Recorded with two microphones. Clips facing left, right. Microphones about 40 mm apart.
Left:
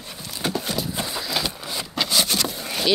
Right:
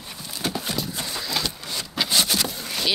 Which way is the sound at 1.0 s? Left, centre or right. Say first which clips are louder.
Left 2 dB; centre.